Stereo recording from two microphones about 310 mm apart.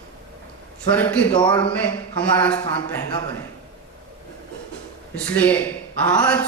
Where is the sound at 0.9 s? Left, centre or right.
Centre.